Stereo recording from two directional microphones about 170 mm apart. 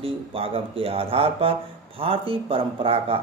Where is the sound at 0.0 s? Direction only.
35° right (ahead or behind).